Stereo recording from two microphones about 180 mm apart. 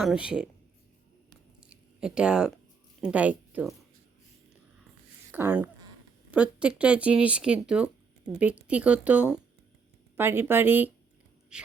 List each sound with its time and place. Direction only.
0.0 s speech: 5° right (ahead or behind)
1.6 s a sound: 5° right (ahead or behind)
3.0 s speech: 5° right (ahead or behind)
5.3 s speech: 10° right (ahead or behind)